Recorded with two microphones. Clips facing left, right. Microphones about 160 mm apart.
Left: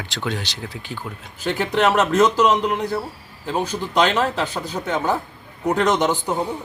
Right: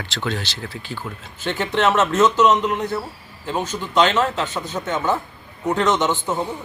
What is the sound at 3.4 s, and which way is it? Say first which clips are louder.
Speech: left 1 dB; 10° left (ahead or behind).